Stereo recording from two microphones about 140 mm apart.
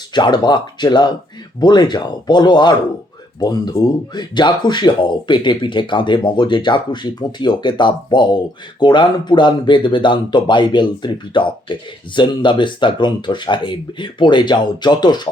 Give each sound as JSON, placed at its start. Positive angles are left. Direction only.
{"t": 0.1, "sound": "speech", "side_deg": 30}